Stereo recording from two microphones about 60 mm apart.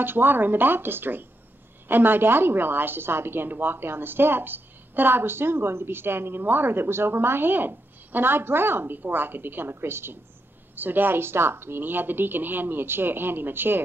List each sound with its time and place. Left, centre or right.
0.0 s a woman's voice: right